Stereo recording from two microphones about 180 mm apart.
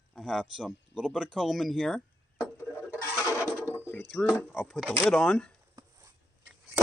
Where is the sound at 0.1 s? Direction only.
Centre (ahead or behind).